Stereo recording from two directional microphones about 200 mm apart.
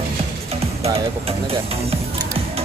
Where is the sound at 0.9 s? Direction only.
30° right (ahead or behind).